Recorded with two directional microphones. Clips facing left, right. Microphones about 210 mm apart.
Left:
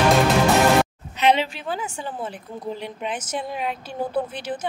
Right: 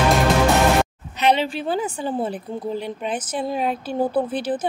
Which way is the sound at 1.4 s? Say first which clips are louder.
Right 4 dB; 35° right (ahead or behind).